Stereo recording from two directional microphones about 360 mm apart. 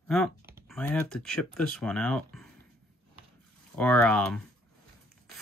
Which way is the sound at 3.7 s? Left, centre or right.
Centre.